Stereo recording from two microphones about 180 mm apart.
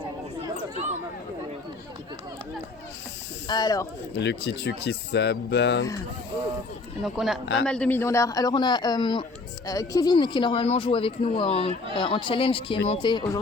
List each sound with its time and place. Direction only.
3.4 s speech: 25° left (ahead or behind)
4.2 s speech: 70° left (ahead or behind)
7.0 s speech: centre (ahead or behind)
7.4 s a man's voice: 90° left
7.7 s speech: 10° left (ahead or behind)